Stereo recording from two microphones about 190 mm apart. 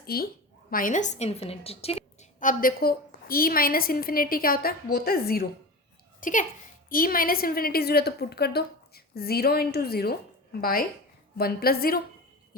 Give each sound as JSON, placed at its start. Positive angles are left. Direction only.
{"t": 0.0, "sound": "a woman's voice", "side_deg": 55}